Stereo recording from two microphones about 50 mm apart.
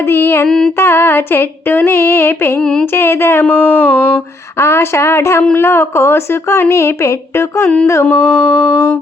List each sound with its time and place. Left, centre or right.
0.0 s a sound: left
0.4 s humming: centre
0.8 s a sound: left
2.6 s humming: centre
2.8 s a woman's voice: left
3.4 s speech: left
4.5 s a woman's voice: left
6.7 s speech: left
8.1 s a sound: left